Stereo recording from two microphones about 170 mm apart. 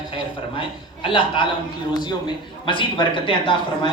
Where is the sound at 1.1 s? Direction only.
30° left (ahead or behind).